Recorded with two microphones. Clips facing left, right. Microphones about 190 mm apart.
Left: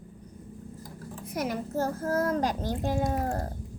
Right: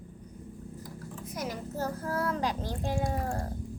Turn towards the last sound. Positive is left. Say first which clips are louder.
# left 3 dB
turn(degrees=40)  # may be behind; listen again after turning